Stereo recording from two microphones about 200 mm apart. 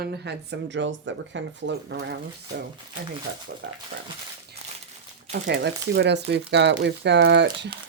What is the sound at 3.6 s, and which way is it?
Speech, 65° right (ahead or behind).